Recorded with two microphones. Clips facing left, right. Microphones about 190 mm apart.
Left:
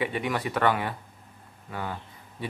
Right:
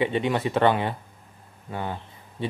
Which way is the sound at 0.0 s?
25° right (ahead or behind).